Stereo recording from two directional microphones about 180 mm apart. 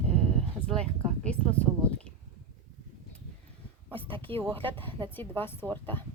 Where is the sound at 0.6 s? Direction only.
5° left (ahead or behind).